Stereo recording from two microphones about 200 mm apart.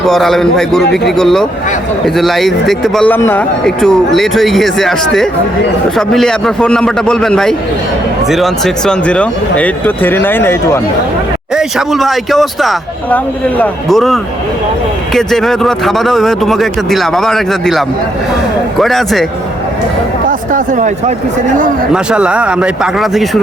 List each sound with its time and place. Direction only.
0.0 s speech: centre (ahead or behind)
11.5 s speech: centre (ahead or behind)
20.2 s speech: 40° right (ahead or behind)
21.9 s speech: 5° right (ahead or behind)